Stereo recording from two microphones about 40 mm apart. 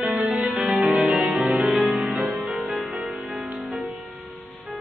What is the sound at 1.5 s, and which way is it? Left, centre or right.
Music, right.